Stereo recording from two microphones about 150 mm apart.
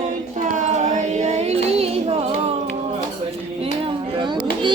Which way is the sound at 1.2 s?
50° right (ahead or behind).